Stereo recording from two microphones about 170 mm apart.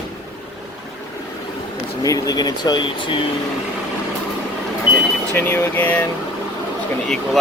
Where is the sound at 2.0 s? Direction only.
20° left (ahead or behind).